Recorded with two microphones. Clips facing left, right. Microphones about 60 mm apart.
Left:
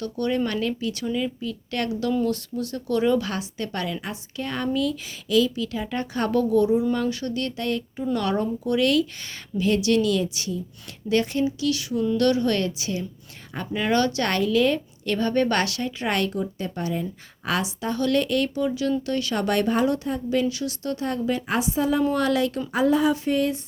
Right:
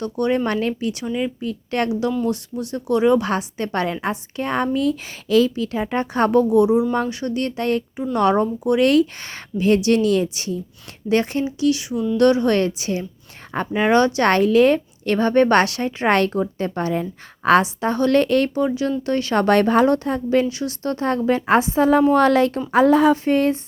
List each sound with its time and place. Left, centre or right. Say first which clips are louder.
0.0 s speech: right 4 dB; right
1.9 s speech: right 3 dB; right
14.3 s a woman's voice: right 7 dB; right
20.3 s a woman's voice: right 5 dB; right
22.7 s speech: right 7 dB; right
23.1 s a woman's voice: right 5 dB; right